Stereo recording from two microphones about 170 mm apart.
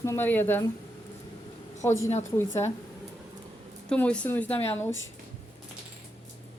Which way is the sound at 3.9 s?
5° left (ahead or behind).